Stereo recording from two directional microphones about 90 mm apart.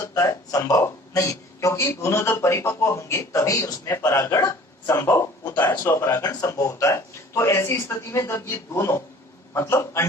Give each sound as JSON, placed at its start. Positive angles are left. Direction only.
{"t": 0.1, "sound": "speech", "side_deg": 40}